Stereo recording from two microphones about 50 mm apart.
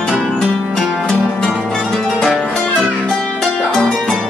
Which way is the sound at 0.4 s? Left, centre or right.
Centre.